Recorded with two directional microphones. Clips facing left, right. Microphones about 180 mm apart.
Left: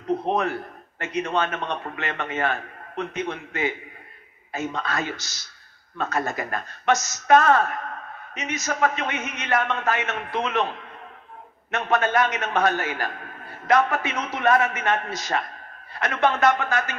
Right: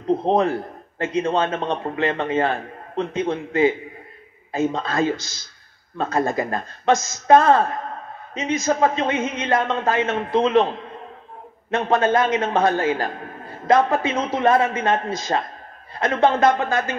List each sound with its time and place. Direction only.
0.0 s a man's voice: 30° right (ahead or behind)